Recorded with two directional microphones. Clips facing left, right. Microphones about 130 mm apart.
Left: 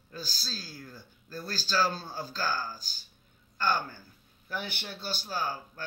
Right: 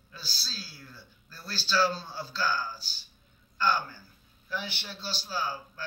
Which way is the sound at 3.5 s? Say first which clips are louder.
Right 1 dB; 50° left (ahead or behind).